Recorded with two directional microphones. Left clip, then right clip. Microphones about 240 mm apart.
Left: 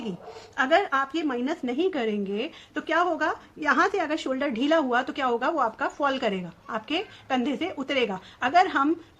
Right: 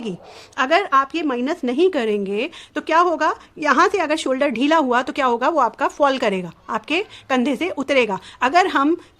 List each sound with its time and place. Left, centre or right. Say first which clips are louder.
0.5 s a woman's voice: right 6 dB; right